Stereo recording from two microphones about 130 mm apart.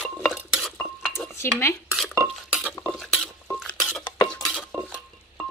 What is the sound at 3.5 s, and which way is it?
Dishes, 5° left (ahead or behind).